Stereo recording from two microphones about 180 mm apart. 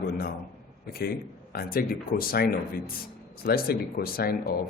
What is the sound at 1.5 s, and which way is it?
A man's voice, 55° left (ahead or behind).